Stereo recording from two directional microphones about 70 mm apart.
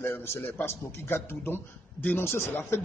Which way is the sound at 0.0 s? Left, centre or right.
Left.